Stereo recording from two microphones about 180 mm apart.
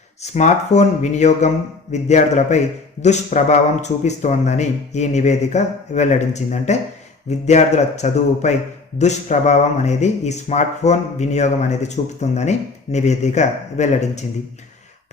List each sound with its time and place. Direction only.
0.2 s speech: 40° left (ahead or behind)